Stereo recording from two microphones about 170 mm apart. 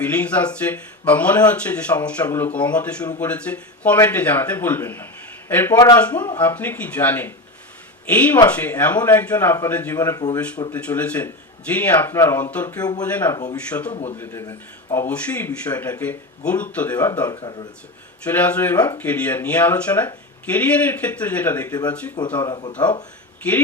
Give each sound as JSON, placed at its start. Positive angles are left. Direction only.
{"t": 0.0, "sound": "a man's voice", "side_deg": 10}
{"t": 5.7, "sound": "speech", "side_deg": 25}
{"t": 6.0, "sound": "speech", "side_deg": 10}
{"t": 10.7, "sound": "speech", "side_deg": 10}
{"t": 13.9, "sound": "a man's voice", "side_deg": 40}
{"t": 14.2, "sound": "speech", "side_deg": 15}
{"t": 17.2, "sound": "speech", "side_deg": 25}
{"t": 18.3, "sound": "speech", "side_deg": 10}
{"t": 22.4, "sound": "speech", "side_deg": 30}